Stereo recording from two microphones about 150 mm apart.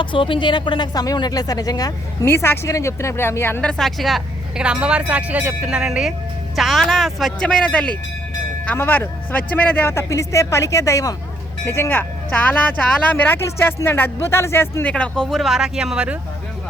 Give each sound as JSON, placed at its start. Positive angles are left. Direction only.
{"t": 0.0, "sound": "speech", "side_deg": 35}